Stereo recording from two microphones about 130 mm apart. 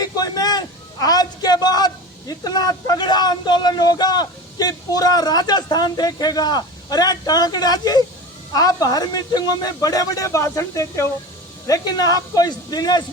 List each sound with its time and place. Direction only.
0.0 s a man's voice: 30° left (ahead or behind)